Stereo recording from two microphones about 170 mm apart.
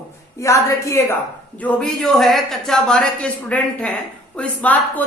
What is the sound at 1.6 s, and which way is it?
A man's voice, 5° left (ahead or behind).